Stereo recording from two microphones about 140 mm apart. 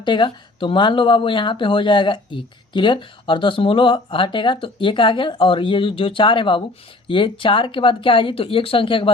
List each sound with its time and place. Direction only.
0.0 s speech: 35° left (ahead or behind)